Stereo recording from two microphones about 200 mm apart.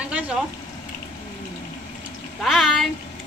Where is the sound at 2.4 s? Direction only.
Centre (ahead or behind).